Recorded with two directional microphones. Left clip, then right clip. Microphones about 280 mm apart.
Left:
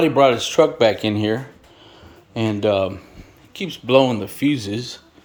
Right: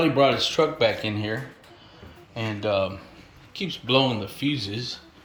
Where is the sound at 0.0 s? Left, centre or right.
Centre; by 2.6 s left.